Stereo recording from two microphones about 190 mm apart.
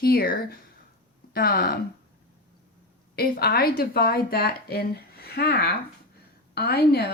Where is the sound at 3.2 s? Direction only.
55° left (ahead or behind).